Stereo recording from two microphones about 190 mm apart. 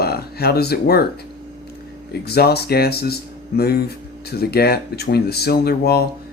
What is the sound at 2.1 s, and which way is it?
Speech, 55° left (ahead or behind).